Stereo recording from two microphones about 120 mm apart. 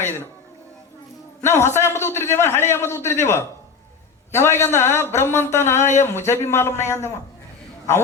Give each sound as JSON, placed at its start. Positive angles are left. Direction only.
{"t": 1.5, "sound": "a man's voice", "side_deg": 20}